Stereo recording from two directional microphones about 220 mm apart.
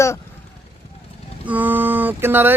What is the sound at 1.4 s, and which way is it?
Mantra, 5° right (ahead or behind).